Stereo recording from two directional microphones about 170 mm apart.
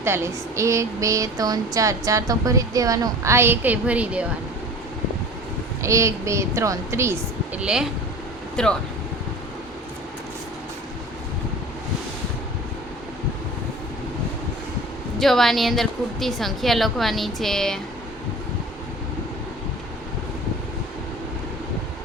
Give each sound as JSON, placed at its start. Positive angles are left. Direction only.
{"t": 0.0, "sound": "speech", "side_deg": -15}
{"t": 5.8, "sound": "speech", "side_deg": -15}
{"t": 8.6, "sound": "a woman's voice", "side_deg": 5}
{"t": 15.2, "sound": "a woman's voice", "side_deg": 0}